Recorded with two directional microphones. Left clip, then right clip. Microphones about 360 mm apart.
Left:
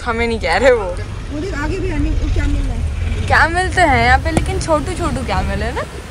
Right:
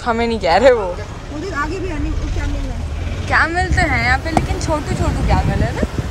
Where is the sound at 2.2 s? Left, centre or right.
Right.